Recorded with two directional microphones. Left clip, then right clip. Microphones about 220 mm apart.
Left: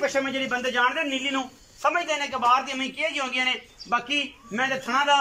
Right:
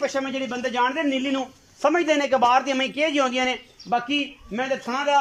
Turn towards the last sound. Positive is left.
turn(degrees=-20)  # may be behind; listen again after turning